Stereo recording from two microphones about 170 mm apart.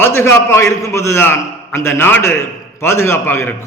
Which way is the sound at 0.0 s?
15° left (ahead or behind).